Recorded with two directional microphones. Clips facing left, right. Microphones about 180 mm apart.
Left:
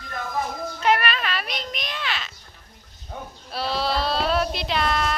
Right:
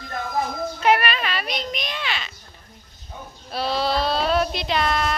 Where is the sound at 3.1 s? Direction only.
65° left (ahead or behind).